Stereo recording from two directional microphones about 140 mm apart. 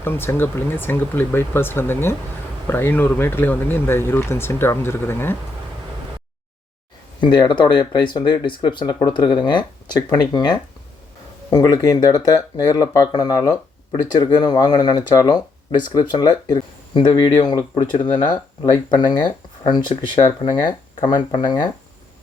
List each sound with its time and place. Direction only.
0.0 s speech: 15° left (ahead or behind)
7.2 s speech: 35° left (ahead or behind)